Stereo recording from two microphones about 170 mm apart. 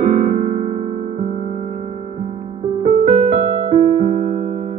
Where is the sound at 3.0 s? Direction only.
45° right (ahead or behind).